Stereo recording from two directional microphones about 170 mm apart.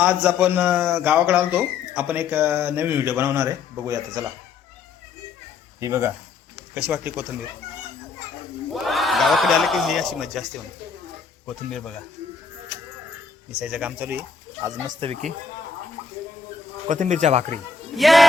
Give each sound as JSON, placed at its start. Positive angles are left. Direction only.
{"t": 0.0, "sound": "speech", "side_deg": -10}
{"t": 5.8, "sound": "speech", "side_deg": -15}
{"t": 8.7, "sound": "speech", "side_deg": 0}
{"t": 13.7, "sound": "speech", "side_deg": -5}
{"t": 14.6, "sound": "speech", "side_deg": -25}
{"t": 16.9, "sound": "speech", "side_deg": -45}
{"t": 17.9, "sound": "speech", "side_deg": 0}